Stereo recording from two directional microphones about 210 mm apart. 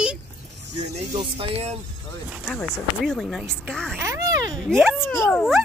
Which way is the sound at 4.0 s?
15° right (ahead or behind).